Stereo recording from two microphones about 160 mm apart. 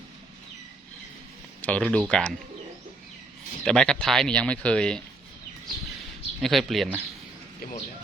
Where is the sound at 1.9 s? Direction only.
5° left (ahead or behind).